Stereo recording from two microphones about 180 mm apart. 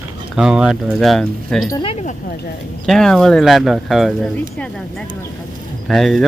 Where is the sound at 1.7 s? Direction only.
30° left (ahead or behind).